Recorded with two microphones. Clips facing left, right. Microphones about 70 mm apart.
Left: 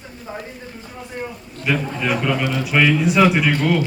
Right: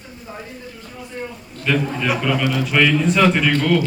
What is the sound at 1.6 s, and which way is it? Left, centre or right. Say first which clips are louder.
A man's voice: right 1 dB; centre.